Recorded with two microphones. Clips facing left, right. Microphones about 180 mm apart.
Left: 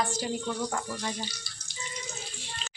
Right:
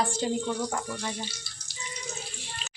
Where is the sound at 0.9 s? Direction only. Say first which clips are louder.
Even; 5° right (ahead or behind).